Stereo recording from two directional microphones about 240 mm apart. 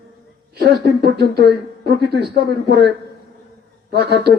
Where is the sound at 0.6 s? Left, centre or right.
Right.